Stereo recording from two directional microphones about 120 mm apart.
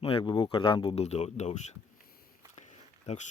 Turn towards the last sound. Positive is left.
turn(degrees=75)  # may be behind; listen again after turning